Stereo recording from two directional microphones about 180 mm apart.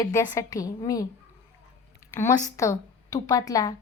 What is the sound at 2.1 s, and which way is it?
Speech, 15° left (ahead or behind).